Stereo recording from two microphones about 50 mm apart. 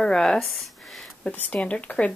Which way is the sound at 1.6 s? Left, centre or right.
Left.